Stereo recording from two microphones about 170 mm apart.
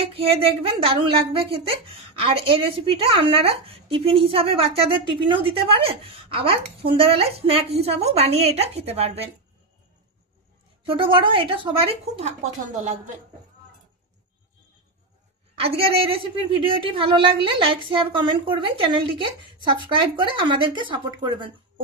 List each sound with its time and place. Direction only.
0.1 s a woman's voice: 35° right (ahead or behind)
10.9 s a woman's voice: 30° right (ahead or behind)
15.5 s a woman's voice: 35° right (ahead or behind)